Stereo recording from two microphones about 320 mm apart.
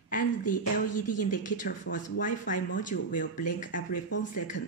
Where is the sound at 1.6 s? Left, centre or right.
Left.